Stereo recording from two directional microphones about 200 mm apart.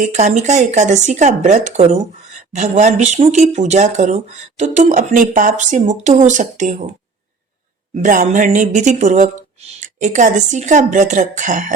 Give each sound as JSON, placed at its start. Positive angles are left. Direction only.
{"t": 0.0, "sound": "a woman's voice", "side_deg": -35}
{"t": 7.9, "sound": "a woman's voice", "side_deg": -40}